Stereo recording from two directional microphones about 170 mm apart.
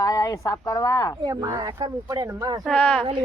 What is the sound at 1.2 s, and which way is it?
Speech, 20° right (ahead or behind).